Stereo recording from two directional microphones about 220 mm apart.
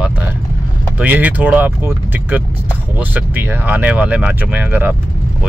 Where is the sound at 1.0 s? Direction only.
10° right (ahead or behind).